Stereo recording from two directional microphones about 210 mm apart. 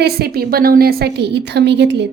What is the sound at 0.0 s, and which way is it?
A woman's voice, 50° right (ahead or behind).